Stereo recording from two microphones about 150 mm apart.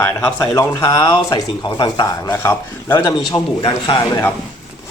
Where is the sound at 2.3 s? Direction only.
15° left (ahead or behind); by 4.0 s 35° left (ahead or behind).